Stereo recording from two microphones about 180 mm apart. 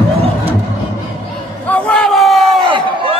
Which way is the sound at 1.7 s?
5° left (ahead or behind).